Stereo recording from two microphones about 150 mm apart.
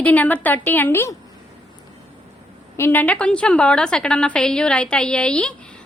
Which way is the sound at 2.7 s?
15° left (ahead or behind).